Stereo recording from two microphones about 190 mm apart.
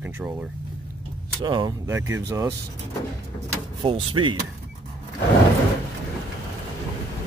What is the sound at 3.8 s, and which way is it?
Speech, 25° right (ahead or behind).